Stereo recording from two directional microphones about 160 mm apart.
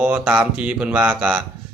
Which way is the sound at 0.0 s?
10° right (ahead or behind).